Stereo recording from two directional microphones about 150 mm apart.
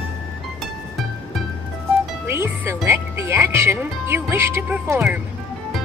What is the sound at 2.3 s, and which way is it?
Music, 15° right (ahead or behind).